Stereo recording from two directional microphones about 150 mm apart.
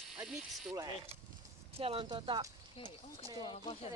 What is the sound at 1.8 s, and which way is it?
Speech, 35° right (ahead or behind).